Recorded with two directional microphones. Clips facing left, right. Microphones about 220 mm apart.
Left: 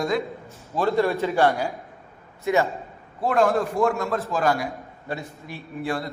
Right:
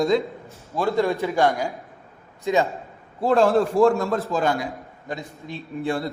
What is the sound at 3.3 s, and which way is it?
A man's voice, 30° right (ahead or behind).